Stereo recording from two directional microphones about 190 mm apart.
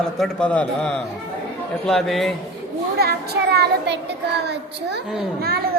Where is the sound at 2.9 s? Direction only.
55° right (ahead or behind).